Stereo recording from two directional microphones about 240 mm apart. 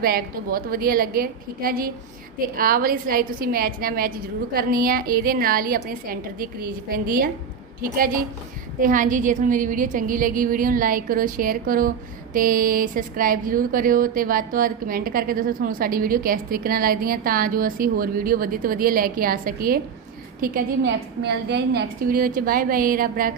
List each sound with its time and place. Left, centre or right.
0.0 s speech: right